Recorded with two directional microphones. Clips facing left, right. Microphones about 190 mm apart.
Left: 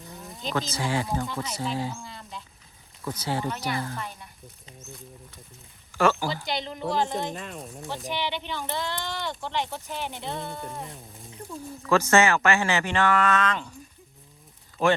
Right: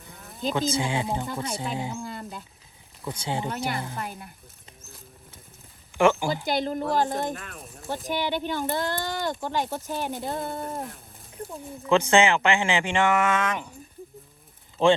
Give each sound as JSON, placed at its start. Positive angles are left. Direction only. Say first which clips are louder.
{"t": 0.8, "sound": "speech", "louder": "even", "side_deg": -15}
{"t": 2.0, "sound": "a sound", "louder": "right 5 dB", "side_deg": -50}
{"t": 3.0, "sound": "speech", "louder": "left 1 dB", "side_deg": -20}
{"t": 6.0, "sound": "speech", "louder": "right 2 dB", "side_deg": -15}
{"t": 6.2, "sound": "speech", "louder": "right 4 dB", "side_deg": -50}
{"t": 7.6, "sound": "speech", "louder": "right 1 dB", "side_deg": 0}
{"t": 8.1, "sound": "speech", "louder": "right 5 dB", "side_deg": -45}
{"t": 11.8, "sound": "speech", "louder": "right 1 dB", "side_deg": -15}
{"t": 14.8, "sound": "speech", "louder": "right 3 dB", "side_deg": -25}